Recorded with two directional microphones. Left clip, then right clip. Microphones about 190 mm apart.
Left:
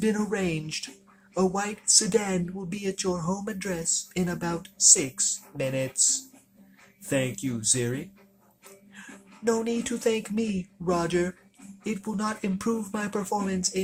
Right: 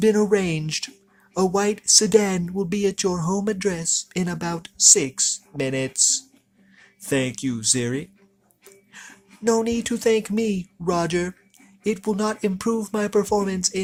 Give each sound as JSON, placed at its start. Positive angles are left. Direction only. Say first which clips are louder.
{"t": 0.0, "sound": "speech", "louder": "right 9 dB", "side_deg": -45}